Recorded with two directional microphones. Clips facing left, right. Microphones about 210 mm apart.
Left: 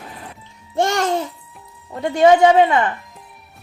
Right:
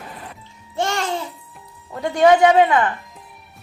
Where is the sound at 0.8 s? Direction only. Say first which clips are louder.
Left 4 dB; 50° left (ahead or behind).